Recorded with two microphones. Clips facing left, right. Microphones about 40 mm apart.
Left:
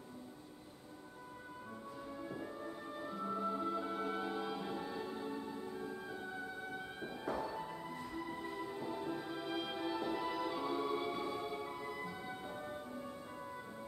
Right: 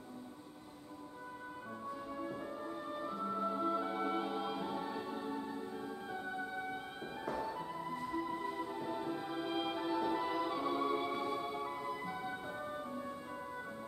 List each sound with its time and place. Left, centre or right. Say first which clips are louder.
2.1 s music: right 3 dB; centre
7.4 s music: right 2 dB; centre